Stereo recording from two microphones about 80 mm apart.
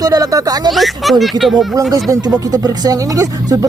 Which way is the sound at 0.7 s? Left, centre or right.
Centre.